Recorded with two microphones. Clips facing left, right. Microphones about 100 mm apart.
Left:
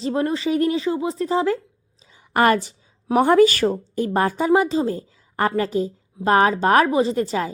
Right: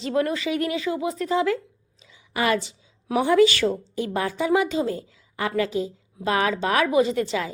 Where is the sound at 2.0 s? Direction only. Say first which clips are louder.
Left 7 dB; 45° left (ahead or behind).